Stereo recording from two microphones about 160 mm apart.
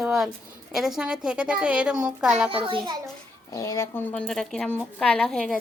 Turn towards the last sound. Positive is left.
turn(degrees=5)  # may be behind; listen again after turning